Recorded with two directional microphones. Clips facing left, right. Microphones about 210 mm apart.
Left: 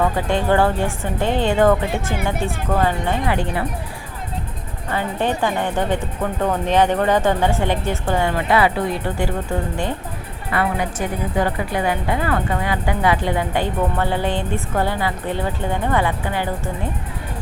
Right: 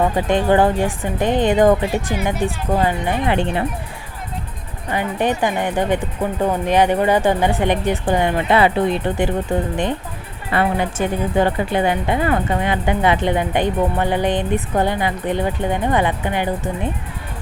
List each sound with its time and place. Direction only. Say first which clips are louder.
0.0 s speech: right 2 dB; 20° right (ahead or behind)
4.9 s speech: right 2 dB; 15° right (ahead or behind)
10.5 s speech: right 3 dB; 25° right (ahead or behind)